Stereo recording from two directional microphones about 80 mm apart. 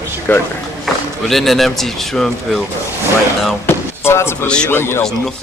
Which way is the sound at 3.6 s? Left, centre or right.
Left.